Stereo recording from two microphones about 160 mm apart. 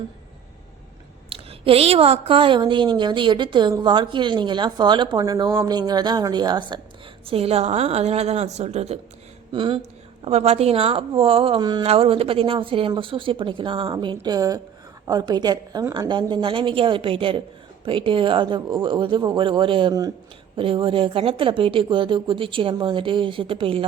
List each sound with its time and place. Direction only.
1.3 s a woman's voice: 35° right (ahead or behind)